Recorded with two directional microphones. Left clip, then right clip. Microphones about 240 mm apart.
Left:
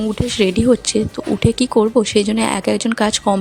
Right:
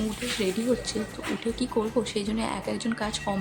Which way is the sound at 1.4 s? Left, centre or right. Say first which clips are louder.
Left 14 dB; left.